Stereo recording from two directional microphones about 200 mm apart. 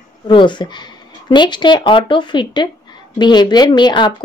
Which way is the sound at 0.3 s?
25° left (ahead or behind).